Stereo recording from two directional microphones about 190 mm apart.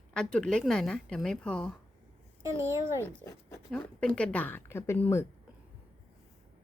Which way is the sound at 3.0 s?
5° left (ahead or behind).